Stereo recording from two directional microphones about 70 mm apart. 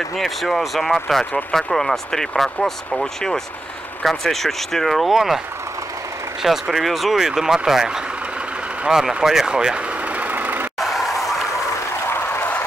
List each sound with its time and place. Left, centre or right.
0.2 s speech: centre
6.4 s speech: centre
9.2 s vehicle: centre; by 10.7 s right
10.8 s a sound: centre
12.1 s applause: left